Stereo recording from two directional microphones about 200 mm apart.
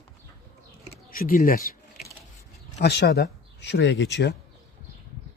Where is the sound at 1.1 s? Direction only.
45° left (ahead or behind).